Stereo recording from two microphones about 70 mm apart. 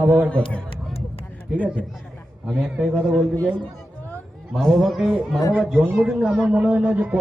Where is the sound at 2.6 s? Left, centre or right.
Centre.